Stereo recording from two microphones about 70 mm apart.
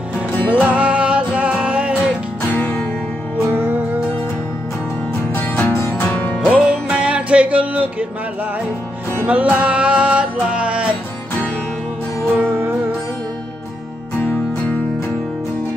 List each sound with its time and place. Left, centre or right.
0.5 s music: centre
2.4 s music: left
5.3 s music: left
6.5 s music: centre
9.2 s music: right
12.4 s music: right